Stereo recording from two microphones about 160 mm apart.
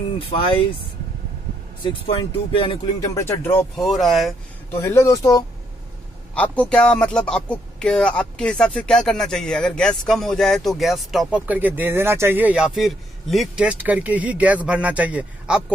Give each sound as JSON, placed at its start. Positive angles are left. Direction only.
{"t": 2.5, "sound": "speech", "side_deg": 35}
{"t": 3.7, "sound": "speech", "side_deg": 0}
{"t": 4.7, "sound": "speech", "side_deg": 15}
{"t": 6.3, "sound": "speech", "side_deg": 10}